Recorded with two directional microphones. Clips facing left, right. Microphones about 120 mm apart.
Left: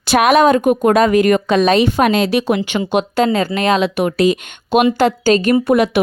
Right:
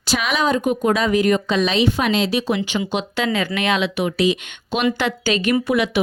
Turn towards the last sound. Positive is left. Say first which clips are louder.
# left 5 dB
turn(degrees=45)  # may be behind; listen again after turning